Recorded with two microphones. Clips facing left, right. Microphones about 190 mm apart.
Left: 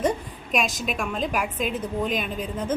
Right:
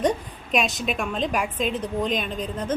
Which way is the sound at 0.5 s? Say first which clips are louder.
Right 2 dB; centre (ahead or behind).